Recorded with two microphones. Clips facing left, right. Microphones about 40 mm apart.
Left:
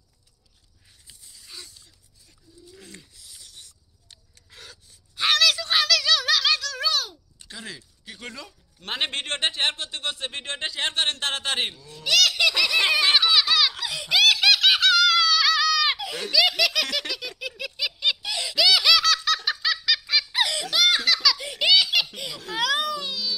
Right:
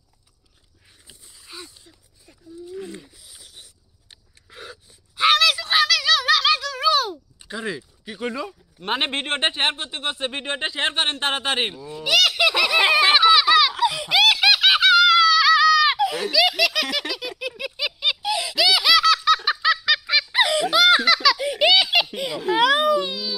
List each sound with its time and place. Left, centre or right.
1.0 s a sound: right
20.5 s laughter: centre
21.5 s giggle: centre